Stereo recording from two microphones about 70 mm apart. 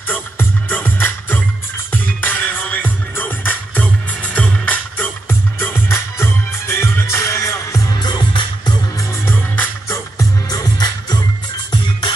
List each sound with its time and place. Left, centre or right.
0.1 s music: left
7.9 s music: left
9.2 s music: left
9.8 s music: left
10.5 s music: left